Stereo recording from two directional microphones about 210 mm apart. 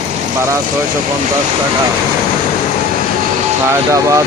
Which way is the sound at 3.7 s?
15° right (ahead or behind).